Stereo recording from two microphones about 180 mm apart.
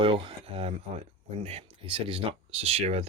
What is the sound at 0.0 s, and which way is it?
Speech, 30° right (ahead or behind).